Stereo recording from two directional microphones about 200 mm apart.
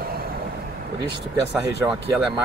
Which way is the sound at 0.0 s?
50° right (ahead or behind).